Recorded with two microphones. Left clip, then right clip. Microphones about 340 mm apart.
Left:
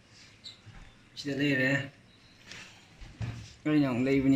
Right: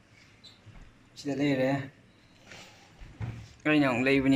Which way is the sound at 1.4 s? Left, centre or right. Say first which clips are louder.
Even; centre.